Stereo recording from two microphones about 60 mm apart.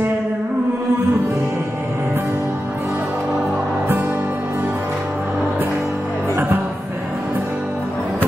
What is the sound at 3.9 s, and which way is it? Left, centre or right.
Music, right.